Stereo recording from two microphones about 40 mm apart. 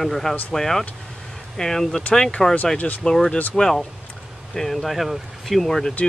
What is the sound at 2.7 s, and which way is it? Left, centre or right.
Speech, left.